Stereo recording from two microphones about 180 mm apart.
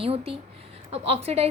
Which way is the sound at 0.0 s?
35° right (ahead or behind).